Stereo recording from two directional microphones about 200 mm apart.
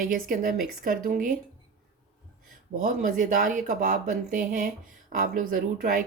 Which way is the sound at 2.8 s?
40° right (ahead or behind).